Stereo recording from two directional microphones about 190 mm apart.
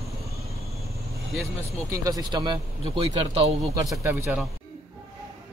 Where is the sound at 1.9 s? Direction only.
20° right (ahead or behind).